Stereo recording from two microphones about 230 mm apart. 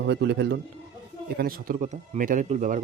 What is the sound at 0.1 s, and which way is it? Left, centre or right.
A man's voice, right.